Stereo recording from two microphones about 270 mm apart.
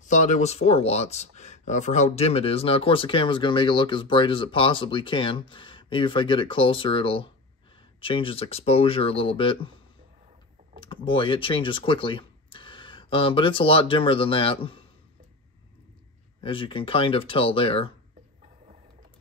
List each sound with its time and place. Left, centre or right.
0.0 s speech: left
10.8 s speech: centre
16.3 s speech: centre